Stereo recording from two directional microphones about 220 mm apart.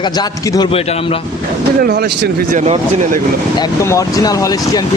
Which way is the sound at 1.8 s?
45° right (ahead or behind).